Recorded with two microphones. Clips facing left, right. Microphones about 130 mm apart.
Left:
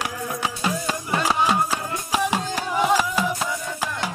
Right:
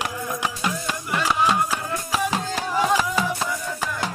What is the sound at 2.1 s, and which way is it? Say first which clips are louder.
Music: left 2 dB; 15° left (ahead or behind).